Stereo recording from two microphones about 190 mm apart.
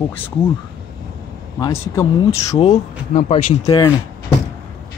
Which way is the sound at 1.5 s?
20° left (ahead or behind).